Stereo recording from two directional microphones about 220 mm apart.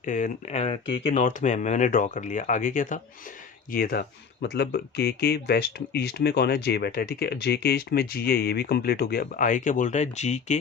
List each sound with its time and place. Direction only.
0.0 s speech: 35° left (ahead or behind)